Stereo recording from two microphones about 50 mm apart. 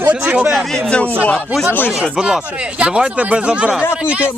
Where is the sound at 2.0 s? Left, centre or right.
Centre.